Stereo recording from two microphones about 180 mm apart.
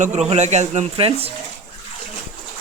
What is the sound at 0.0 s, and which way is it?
Speech, 40° right (ahead or behind).